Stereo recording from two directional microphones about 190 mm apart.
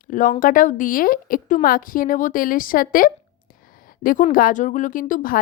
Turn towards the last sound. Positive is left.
turn(degrees=45)  # may be behind; listen again after turning